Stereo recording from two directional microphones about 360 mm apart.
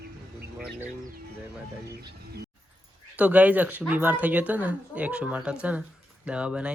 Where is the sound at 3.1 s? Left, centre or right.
Centre.